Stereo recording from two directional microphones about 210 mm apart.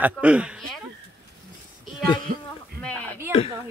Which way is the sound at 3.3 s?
25° left (ahead or behind).